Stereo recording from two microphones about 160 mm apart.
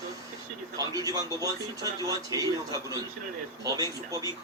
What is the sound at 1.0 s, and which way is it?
Speech, 20° right (ahead or behind).